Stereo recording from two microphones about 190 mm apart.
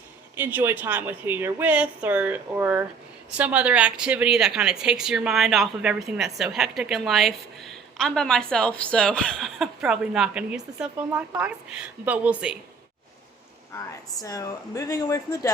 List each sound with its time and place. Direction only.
0.3 s a woman's voice: 10° right (ahead or behind)
13.7 s speech: 20° left (ahead or behind)